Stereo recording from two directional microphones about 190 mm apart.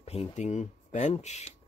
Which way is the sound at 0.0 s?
35° left (ahead or behind).